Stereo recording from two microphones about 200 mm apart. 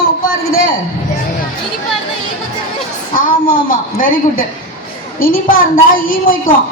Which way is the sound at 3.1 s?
45° left (ahead or behind).